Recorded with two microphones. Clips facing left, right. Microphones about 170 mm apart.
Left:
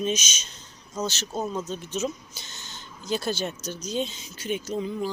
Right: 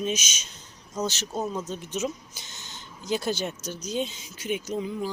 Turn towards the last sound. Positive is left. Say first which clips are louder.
# left 1 dB
turn(degrees=-10)  # may be behind; listen again after turning